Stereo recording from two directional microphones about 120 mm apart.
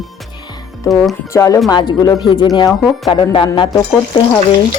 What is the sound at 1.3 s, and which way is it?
Speech, 25° left (ahead or behind).